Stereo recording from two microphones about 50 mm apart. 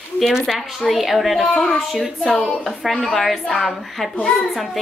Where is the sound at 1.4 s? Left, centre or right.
Centre.